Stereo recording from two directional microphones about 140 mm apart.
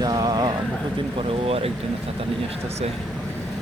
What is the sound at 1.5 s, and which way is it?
Speech, 45° right (ahead or behind).